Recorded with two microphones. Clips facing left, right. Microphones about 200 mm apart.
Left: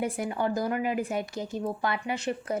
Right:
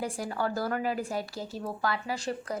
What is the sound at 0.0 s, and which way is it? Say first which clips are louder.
Speech: left 3 dB; 20° left (ahead or behind).